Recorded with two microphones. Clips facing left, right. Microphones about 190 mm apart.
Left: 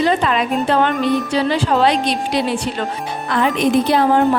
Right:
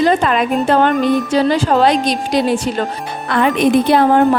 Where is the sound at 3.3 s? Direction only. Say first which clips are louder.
Right 3 dB; 60° right (ahead or behind).